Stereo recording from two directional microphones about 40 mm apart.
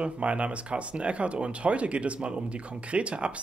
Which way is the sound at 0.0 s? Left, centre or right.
Right.